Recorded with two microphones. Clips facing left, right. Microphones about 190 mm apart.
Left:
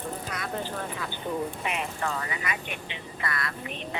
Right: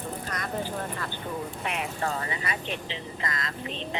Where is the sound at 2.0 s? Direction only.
35° right (ahead or behind).